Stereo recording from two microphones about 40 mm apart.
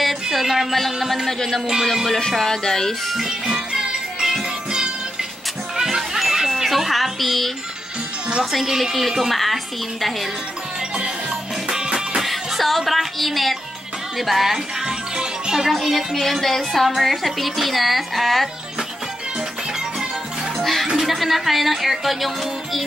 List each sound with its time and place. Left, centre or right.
0.0 s music: centre
2.3 s speech: centre
3.7 s music: centre
8.6 s a woman's voice: centre
11.7 s music: centre
12.2 s music: centre
14.1 s a woman's voice: centre
14.9 s music: centre
15.7 s a woman's voice: centre
20.8 s a woman's voice: centre